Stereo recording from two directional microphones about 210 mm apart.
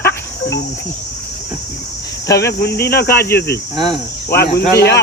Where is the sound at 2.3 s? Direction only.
15° left (ahead or behind).